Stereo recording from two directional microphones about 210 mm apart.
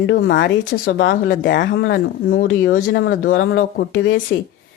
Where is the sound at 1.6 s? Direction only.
60° left (ahead or behind).